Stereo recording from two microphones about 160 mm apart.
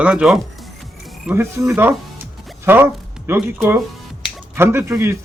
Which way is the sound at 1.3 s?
15° right (ahead or behind).